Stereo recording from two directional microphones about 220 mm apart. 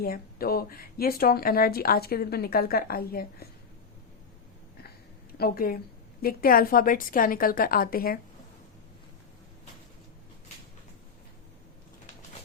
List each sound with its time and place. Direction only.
0.0 s speech: 45° left (ahead or behind)
5.4 s a woman's voice: 40° left (ahead or behind)